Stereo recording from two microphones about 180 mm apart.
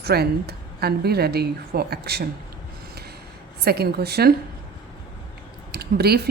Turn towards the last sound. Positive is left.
turn(degrees=-60)  # may be behind; listen again after turning